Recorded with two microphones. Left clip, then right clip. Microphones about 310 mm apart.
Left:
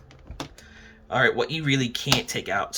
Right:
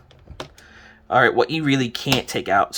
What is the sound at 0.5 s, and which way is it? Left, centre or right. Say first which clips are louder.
Speech: right 3 dB; centre.